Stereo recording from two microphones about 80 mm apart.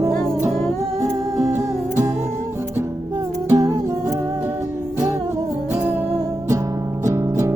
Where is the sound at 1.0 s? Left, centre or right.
Right.